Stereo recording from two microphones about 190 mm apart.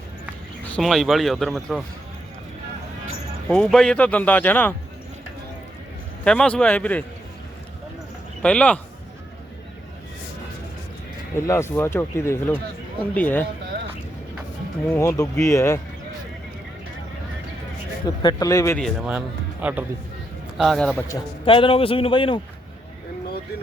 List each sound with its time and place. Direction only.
0.7 s speech: centre (ahead or behind)
3.5 s speech: 5° left (ahead or behind)
6.2 s speech: 5° left (ahead or behind)
8.4 s speech: 5° left (ahead or behind)
11.3 s speech: 15° left (ahead or behind)
14.8 s speech: 15° left (ahead or behind)
18.0 s a man's voice: 20° left (ahead or behind)
18.8 s speech: centre (ahead or behind)
21.4 s a man's voice: 25° left (ahead or behind)